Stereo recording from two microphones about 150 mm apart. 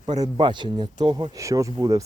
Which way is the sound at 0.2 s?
30° right (ahead or behind).